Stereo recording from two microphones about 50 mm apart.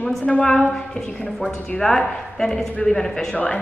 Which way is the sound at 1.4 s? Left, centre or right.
Centre.